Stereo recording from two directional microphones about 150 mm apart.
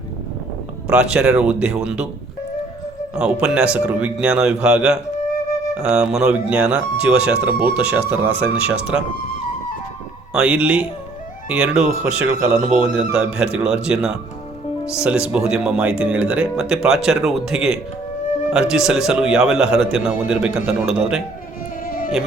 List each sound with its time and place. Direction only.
0.9 s speech: 5° right (ahead or behind)
3.2 s a man's voice: 5° right (ahead or behind)
10.3 s a man's voice: 10° right (ahead or behind)
21.8 s music: 65° left (ahead or behind)